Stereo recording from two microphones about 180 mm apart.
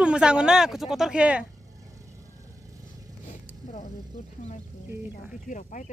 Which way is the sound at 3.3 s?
45° left (ahead or behind).